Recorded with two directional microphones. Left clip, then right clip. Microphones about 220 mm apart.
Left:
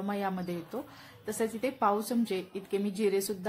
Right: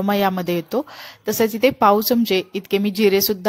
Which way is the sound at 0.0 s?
40° right (ahead or behind).